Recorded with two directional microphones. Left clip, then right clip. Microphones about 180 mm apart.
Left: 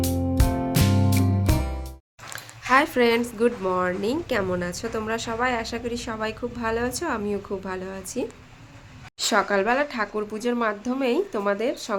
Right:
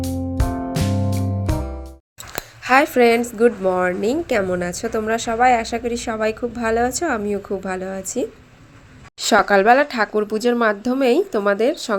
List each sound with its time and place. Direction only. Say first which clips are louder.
0.0 s music: even; centre (ahead or behind)
2.6 s a woman's voice: right 5 dB; 20° right (ahead or behind)
9.3 s a woman's voice: right 9 dB; 30° right (ahead or behind)